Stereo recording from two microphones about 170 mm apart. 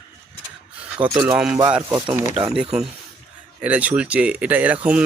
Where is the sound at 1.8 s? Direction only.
20° right (ahead or behind).